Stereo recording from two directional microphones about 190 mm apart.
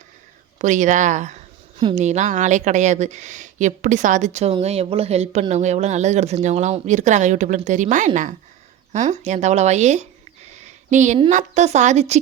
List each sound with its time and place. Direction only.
0.6 s speech: 40° right (ahead or behind)